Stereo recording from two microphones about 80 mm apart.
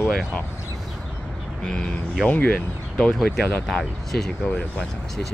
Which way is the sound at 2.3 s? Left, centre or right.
Centre.